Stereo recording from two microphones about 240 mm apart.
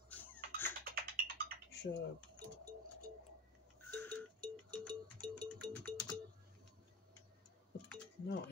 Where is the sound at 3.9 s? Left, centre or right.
Centre.